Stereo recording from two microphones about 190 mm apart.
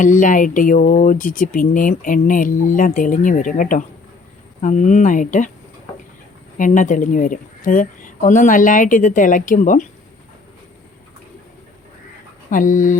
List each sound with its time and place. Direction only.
0.0 s speech: 45° left (ahead or behind)
6.6 s speech: 40° left (ahead or behind)
12.5 s speech: 45° left (ahead or behind)